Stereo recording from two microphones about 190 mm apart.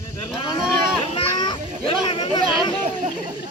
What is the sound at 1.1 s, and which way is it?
Children playing, 20° left (ahead or behind).